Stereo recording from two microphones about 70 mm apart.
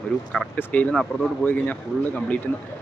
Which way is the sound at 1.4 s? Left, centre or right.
Left.